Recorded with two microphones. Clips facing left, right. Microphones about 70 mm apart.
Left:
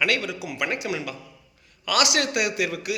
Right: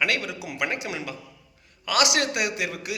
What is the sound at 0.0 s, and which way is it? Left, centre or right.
A man's voice, right.